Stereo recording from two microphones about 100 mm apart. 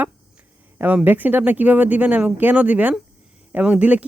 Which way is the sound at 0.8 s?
15° right (ahead or behind).